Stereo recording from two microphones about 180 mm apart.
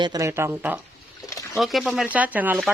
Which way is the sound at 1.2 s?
20° left (ahead or behind).